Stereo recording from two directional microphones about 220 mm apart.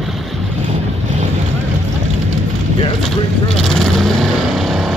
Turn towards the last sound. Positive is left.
turn(degrees=0)  # may be behind; listen again after turning